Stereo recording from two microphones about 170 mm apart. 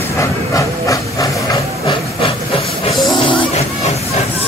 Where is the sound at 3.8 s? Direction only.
40° left (ahead or behind).